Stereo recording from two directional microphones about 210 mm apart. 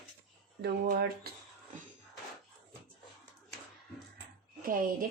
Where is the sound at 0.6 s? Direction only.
50° right (ahead or behind).